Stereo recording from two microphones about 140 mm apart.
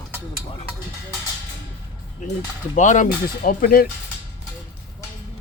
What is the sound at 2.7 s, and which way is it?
Speech, 60° left (ahead or behind).